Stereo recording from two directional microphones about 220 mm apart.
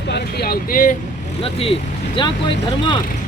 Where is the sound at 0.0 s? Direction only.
50° left (ahead or behind).